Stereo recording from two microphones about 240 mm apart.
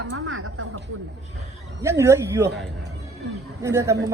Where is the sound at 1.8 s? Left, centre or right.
Centre.